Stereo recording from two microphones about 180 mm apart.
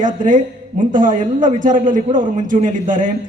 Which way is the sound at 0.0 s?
45° right (ahead or behind).